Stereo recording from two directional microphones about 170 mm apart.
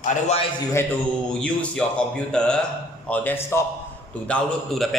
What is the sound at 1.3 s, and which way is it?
A man's voice, 5° left (ahead or behind).